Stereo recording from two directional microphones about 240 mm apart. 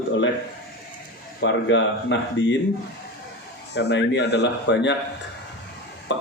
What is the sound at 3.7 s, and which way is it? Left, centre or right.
A man's voice, left.